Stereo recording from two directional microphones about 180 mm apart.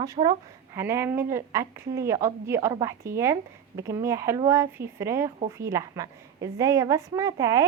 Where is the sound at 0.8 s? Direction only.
15° right (ahead or behind).